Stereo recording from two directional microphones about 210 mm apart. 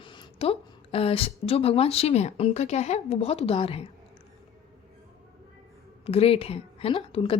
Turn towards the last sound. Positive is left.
turn(degrees=25)  # may be behind; listen again after turning